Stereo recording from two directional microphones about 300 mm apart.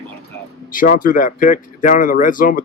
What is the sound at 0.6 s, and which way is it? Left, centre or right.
Speech, left.